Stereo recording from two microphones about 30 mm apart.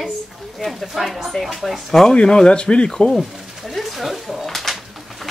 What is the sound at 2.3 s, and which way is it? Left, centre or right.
Speech, left.